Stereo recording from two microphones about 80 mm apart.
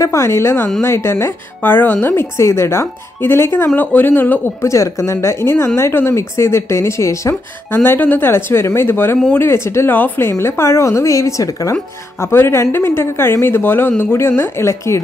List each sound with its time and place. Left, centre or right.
0.0 s a woman's voice: left
4.6 s a woman's voice: left
12.2 s a woman's voice: left